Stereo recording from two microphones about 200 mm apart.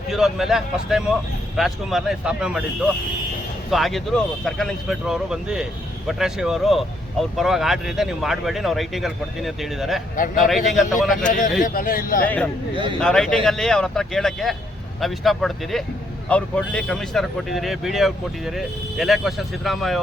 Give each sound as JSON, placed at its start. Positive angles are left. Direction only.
{"t": 0.1, "sound": "speech", "side_deg": 0}
{"t": 3.7, "sound": "speech", "side_deg": 0}
{"t": 11.3, "sound": "a man's voice", "side_deg": 40}
{"t": 12.2, "sound": "a man's voice", "side_deg": 10}